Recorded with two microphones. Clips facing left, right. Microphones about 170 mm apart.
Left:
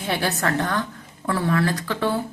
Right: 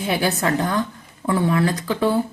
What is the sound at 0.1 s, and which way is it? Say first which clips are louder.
Speech: right 2 dB; 20° right (ahead or behind).